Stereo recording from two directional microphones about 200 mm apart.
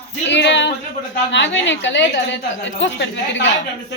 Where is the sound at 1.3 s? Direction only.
65° left (ahead or behind).